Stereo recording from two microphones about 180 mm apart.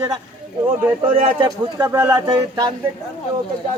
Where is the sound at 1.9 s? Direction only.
15° right (ahead or behind).